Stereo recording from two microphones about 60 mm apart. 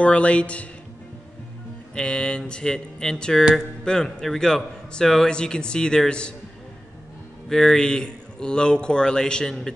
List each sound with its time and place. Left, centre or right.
0.0 s speech: left
2.0 s speech: centre
7.4 s speech: centre